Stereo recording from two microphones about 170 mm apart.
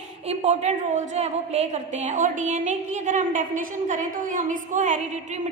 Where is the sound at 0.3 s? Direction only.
40° right (ahead or behind).